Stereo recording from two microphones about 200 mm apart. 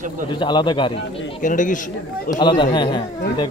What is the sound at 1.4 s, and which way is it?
Speech, 40° left (ahead or behind).